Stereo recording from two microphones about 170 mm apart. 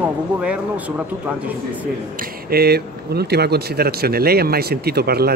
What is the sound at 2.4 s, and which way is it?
Speech, 65° right (ahead or behind).